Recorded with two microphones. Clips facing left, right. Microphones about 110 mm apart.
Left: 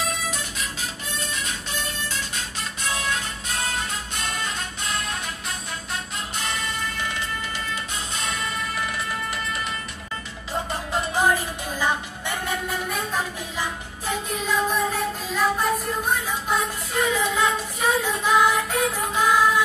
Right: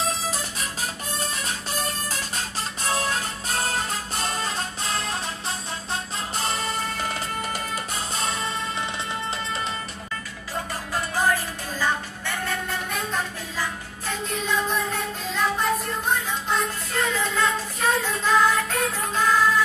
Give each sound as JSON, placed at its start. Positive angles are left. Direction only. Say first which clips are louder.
{"t": 0.0, "sound": "music", "louder": "right 1 dB", "side_deg": -35}
{"t": 10.5, "sound": "music", "louder": "left 3 dB", "side_deg": 20}
{"t": 12.8, "sound": "music", "louder": "left 1 dB", "side_deg": 5}
{"t": 13.6, "sound": "music", "louder": "right 1 dB", "side_deg": 15}
{"t": 14.3, "sound": "music", "louder": "left 1 dB", "side_deg": 5}